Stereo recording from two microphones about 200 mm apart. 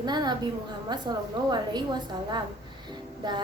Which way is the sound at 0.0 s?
20° right (ahead or behind).